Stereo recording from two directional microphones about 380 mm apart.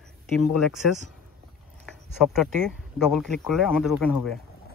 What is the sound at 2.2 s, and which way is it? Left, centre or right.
Speech, centre.